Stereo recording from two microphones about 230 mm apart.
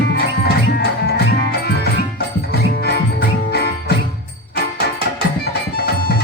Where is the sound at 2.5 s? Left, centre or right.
Left.